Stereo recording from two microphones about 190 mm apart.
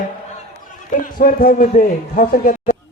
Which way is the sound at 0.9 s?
45° left (ahead or behind).